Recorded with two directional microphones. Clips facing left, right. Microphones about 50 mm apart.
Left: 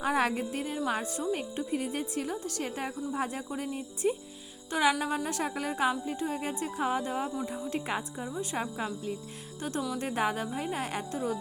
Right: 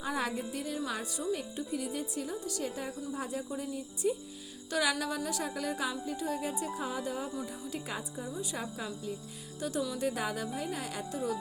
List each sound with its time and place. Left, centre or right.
0.0 s a woman's voice: left
0.9 s a woman's voice: left
4.7 s speech: left
6.5 s a woman's voice: left